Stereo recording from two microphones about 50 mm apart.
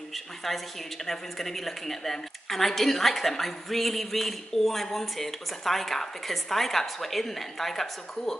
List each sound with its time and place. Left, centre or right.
0.1 s a woman's voice: centre